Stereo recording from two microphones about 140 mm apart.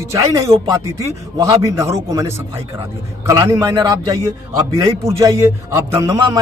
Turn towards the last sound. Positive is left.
turn(degrees=-25)  # may be behind; listen again after turning